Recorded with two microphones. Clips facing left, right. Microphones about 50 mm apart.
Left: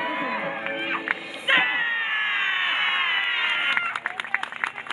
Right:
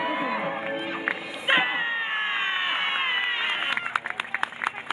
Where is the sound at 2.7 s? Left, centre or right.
Left.